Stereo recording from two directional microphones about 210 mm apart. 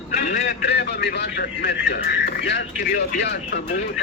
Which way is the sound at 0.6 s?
55° left (ahead or behind).